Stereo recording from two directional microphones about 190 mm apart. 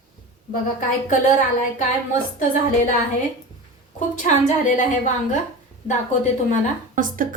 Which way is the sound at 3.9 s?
40° left (ahead or behind).